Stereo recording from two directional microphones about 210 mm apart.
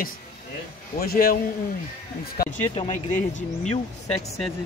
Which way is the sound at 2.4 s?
45° left (ahead or behind).